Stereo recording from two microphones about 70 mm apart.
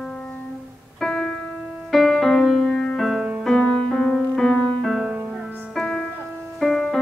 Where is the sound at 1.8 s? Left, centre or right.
Centre.